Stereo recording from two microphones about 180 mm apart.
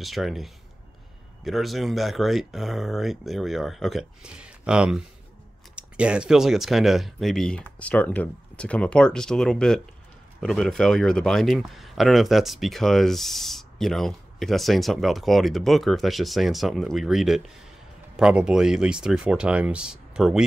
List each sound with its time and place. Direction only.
0.0 s speech: centre (ahead or behind)